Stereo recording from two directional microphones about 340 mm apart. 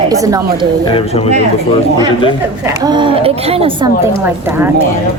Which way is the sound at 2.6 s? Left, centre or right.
Centre.